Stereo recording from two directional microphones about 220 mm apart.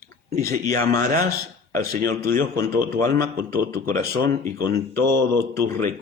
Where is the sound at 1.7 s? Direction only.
40° right (ahead or behind).